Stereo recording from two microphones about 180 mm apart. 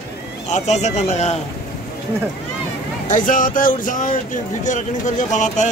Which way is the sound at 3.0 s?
45° left (ahead or behind).